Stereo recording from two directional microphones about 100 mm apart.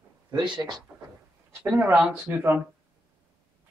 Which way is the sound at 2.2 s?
20° right (ahead or behind).